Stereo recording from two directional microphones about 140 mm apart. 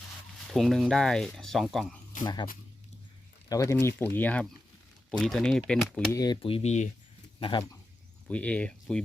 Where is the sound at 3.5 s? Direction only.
20° left (ahead or behind).